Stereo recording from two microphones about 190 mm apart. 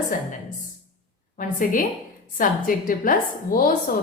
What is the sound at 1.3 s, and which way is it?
Speech, 45° left (ahead or behind).